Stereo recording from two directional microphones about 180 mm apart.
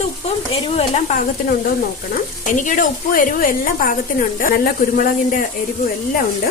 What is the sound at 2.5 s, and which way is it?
A woman's voice, 45° left (ahead or behind).